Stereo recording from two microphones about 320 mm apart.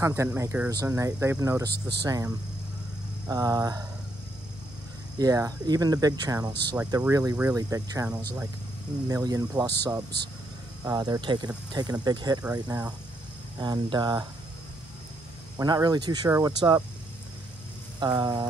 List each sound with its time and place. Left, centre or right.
0.0 s speech: centre
1.7 s speech: right
2.0 s speech: centre
5.2 s speech: centre
15.5 s speech: centre
18.0 s speech: centre